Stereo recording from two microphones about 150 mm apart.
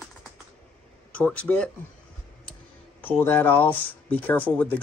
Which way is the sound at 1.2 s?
10° left (ahead or behind).